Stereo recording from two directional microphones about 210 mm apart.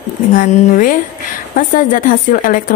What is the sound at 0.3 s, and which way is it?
A woman's voice, 40° left (ahead or behind).